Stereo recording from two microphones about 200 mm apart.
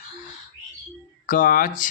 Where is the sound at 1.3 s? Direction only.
45° left (ahead or behind).